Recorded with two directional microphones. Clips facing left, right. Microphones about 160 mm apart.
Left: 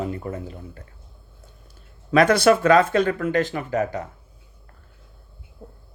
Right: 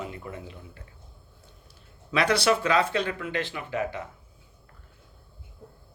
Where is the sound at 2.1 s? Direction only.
45° left (ahead or behind).